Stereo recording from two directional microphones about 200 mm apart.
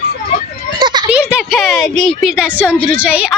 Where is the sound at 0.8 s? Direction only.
20° right (ahead or behind).